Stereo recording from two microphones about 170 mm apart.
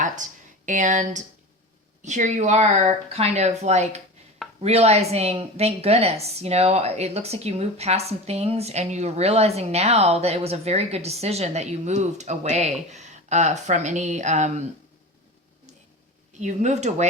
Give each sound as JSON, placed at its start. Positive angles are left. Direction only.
{"t": 0.0, "sound": "a woman's voice", "side_deg": -50}
{"t": 16.4, "sound": "speech", "side_deg": -45}